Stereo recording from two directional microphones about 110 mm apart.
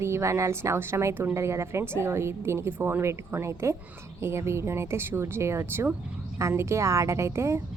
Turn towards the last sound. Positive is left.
turn(degrees=-25)  # may be behind; listen again after turning